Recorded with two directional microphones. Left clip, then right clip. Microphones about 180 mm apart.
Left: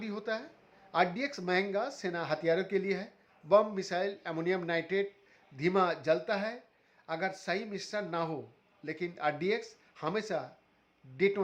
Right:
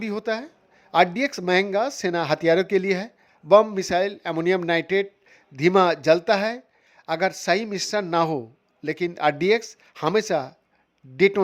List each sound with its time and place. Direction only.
0.0 s a man's voice: 40° right (ahead or behind)